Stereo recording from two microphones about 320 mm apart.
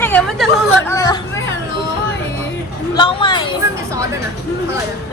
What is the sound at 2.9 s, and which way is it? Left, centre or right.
Speech, centre.